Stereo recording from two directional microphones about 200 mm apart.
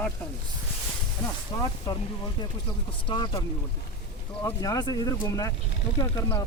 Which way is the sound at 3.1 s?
20° left (ahead or behind).